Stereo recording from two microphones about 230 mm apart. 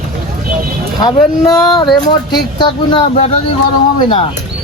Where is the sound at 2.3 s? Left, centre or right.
Centre.